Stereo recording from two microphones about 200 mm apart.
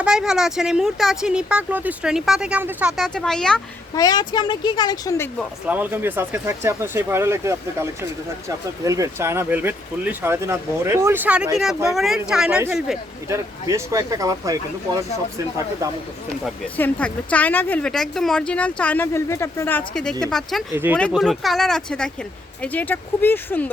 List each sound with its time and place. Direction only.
0.0 s speech: 5° right (ahead or behind)
3.9 s speech: 20° left (ahead or behind)
5.6 s speech: 10° right (ahead or behind)
13.2 s speech: 15° right (ahead or behind)
16.7 s a woman's voice: 5° left (ahead or behind)
20.7 s speech: 10° right (ahead or behind)
21.1 s a woman's voice: centre (ahead or behind)